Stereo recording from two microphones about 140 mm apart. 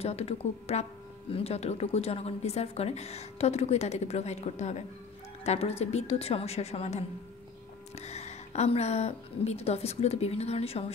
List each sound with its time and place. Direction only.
0.0 s a woman's voice: 45° left (ahead or behind)